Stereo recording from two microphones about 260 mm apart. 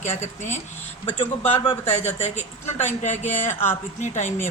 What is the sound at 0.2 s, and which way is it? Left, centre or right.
A woman's voice, left.